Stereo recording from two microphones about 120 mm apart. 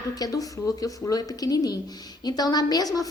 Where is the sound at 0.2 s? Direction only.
30° left (ahead or behind).